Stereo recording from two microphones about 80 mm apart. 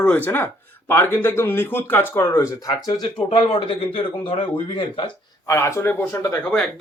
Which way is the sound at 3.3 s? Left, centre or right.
Left.